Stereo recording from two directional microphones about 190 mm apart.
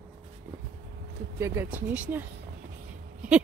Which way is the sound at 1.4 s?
15° right (ahead or behind).